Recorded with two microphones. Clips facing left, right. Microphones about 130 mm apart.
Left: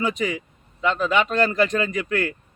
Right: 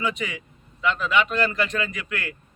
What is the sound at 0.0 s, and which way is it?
A man's voice, 35° left (ahead or behind).